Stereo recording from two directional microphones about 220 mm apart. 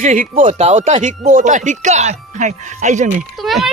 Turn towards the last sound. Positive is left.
turn(degrees=0)  # may be behind; listen again after turning